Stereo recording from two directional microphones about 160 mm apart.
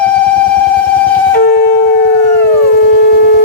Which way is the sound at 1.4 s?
85° left.